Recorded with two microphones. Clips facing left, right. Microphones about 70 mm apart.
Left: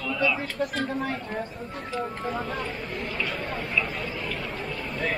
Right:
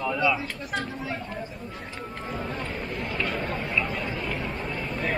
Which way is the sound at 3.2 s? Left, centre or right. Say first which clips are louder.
Right 3 dB; right.